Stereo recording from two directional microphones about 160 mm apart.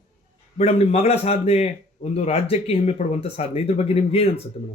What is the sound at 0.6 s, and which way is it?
A man's voice, 40° left (ahead or behind).